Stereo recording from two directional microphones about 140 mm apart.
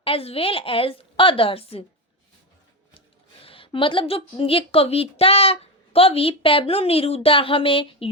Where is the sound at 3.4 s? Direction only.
40° left (ahead or behind).